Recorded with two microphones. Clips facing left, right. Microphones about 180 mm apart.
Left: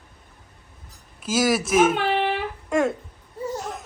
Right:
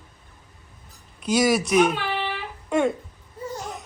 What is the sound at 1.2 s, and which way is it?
Speech, centre (ahead or behind).